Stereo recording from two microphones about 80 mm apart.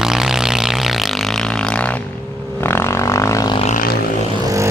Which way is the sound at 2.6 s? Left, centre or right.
Left.